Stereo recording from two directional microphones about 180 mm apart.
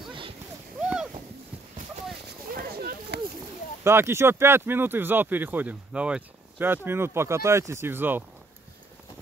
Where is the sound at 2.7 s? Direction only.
60° right (ahead or behind).